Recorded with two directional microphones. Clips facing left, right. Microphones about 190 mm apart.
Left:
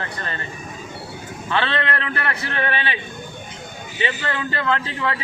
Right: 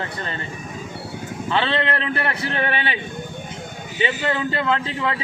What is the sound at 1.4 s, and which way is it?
A man's voice, 30° right (ahead or behind).